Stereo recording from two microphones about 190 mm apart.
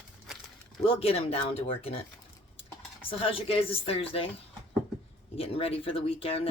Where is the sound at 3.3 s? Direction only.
30° left (ahead or behind).